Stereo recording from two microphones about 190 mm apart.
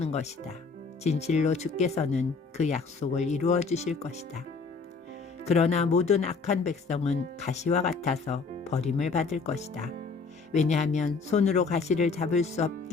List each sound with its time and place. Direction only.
0.0 s speech: 35° left (ahead or behind)
5.5 s speech: 35° left (ahead or behind)